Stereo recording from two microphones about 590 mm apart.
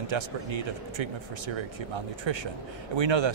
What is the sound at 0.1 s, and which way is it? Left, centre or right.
A man's voice, right.